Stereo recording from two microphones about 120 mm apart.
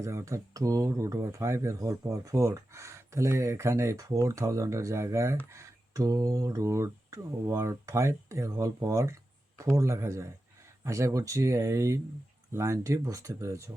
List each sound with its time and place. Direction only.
0.0 s speech: 25° right (ahead or behind)